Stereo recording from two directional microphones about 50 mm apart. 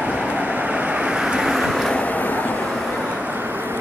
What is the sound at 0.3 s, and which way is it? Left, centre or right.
Vehicle, right.